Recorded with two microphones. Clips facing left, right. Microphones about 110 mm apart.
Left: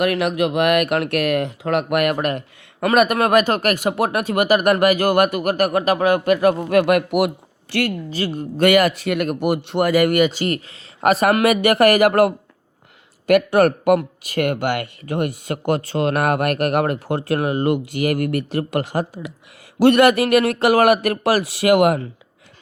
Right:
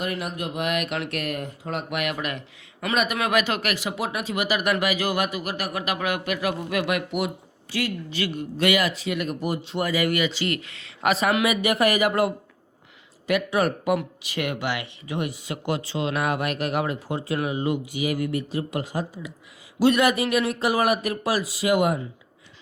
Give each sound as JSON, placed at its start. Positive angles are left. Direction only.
{"t": 0.0, "sound": "speech", "side_deg": 85}
{"t": 2.8, "sound": "speech", "side_deg": 60}
{"t": 8.1, "sound": "speech", "side_deg": 40}